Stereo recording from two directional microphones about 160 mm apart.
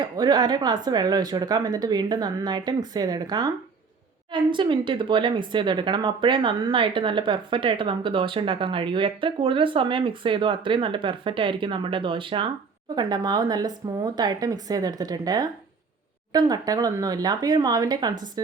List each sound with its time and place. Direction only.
0.0 s speech: 25° right (ahead or behind)